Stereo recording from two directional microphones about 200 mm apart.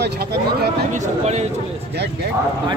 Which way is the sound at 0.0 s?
50° right (ahead or behind).